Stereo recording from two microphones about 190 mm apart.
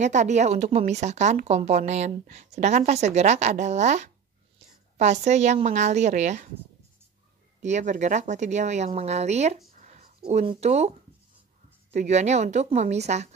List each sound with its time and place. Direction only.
0.0 s speech: 40° right (ahead or behind)
7.6 s speech: 40° right (ahead or behind)
9.8 s a sound: 40° right (ahead or behind)
10.3 s speech: 30° right (ahead or behind)